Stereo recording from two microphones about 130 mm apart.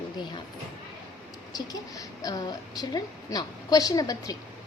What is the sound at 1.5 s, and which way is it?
A woman's voice, 30° left (ahead or behind).